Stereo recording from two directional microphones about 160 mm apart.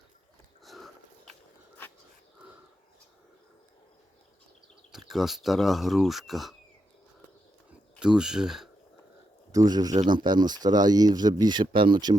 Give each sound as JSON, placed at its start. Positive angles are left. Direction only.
{"t": 0.6, "sound": "sniff", "side_deg": 0}
{"t": 4.9, "sound": "speech", "side_deg": 0}
{"t": 7.9, "sound": "speech", "side_deg": -5}
{"t": 9.5, "sound": "speech", "side_deg": -25}